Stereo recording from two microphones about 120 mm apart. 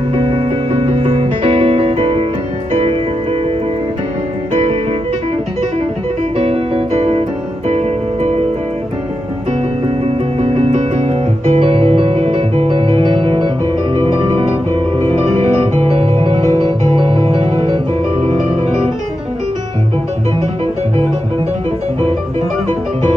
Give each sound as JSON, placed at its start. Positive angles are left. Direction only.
{"t": 0.7, "sound": "music", "side_deg": -55}
{"t": 6.3, "sound": "music", "side_deg": -55}
{"t": 10.0, "sound": "music", "side_deg": -65}
{"t": 15.6, "sound": "music", "side_deg": -60}